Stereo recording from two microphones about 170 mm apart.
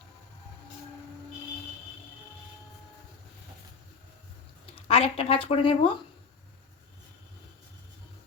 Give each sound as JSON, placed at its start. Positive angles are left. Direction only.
{"t": 4.7, "sound": "speech", "side_deg": 35}